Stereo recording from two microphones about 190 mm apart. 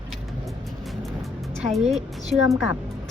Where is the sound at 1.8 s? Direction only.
35° right (ahead or behind).